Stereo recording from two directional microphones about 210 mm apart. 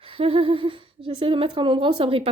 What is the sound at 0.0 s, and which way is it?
Speech, 25° right (ahead or behind).